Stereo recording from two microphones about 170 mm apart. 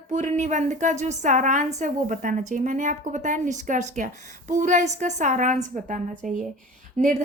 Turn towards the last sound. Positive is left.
turn(degrees=-45)  # may be behind; listen again after turning